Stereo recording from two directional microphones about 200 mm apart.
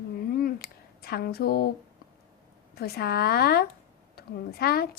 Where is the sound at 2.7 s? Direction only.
50° left (ahead or behind).